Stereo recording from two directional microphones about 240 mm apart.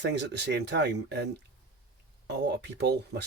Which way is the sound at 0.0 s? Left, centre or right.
Right.